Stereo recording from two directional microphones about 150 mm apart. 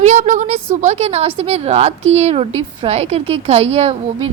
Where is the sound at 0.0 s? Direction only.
55° right (ahead or behind).